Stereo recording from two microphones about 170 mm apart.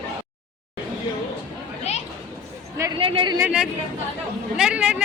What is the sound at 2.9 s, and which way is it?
Speech, 30° right (ahead or behind).